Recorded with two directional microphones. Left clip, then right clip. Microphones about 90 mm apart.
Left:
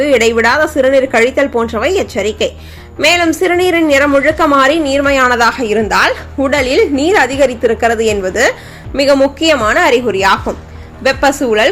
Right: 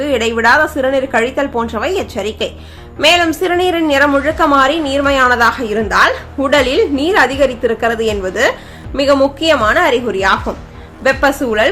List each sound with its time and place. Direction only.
0.0 s a woman's voice: 35° left (ahead or behind)
8.9 s a woman's voice: 15° left (ahead or behind)
9.4 s a woman's voice: 30° left (ahead or behind)